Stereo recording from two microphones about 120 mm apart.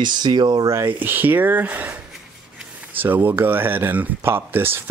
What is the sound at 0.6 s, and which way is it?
Speech, 20° right (ahead or behind).